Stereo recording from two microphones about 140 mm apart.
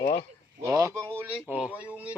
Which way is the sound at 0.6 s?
25° right (ahead or behind).